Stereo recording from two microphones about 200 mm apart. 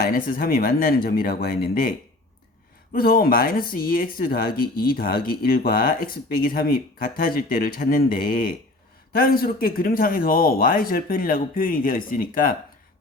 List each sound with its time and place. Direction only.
0.0 s speech: 45° left (ahead or behind)